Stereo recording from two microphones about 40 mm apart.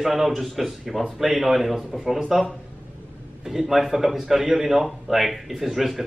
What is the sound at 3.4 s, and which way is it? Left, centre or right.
A man's voice, centre.